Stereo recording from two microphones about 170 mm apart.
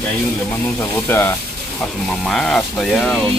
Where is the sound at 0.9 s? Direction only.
15° left (ahead or behind).